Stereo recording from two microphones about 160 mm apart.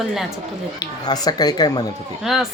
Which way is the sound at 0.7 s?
25° left (ahead or behind).